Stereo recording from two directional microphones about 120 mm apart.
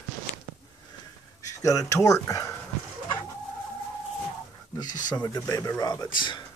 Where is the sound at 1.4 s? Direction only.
30° left (ahead or behind).